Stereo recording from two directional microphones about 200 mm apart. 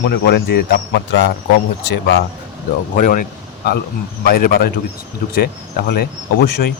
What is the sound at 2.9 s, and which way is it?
Speech, 40° left (ahead or behind).